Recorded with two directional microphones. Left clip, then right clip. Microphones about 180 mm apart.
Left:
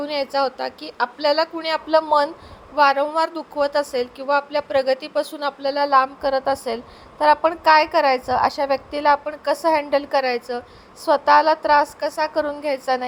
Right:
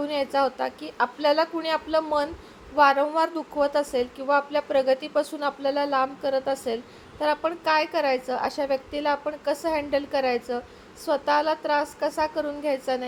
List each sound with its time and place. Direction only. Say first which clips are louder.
0.0 s a woman's voice: left 2 dB; 20° left (ahead or behind)